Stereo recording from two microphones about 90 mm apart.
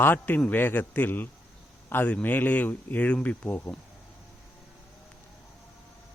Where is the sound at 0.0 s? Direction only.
20° left (ahead or behind).